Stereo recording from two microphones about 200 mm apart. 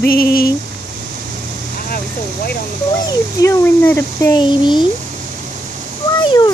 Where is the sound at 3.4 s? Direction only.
15° left (ahead or behind).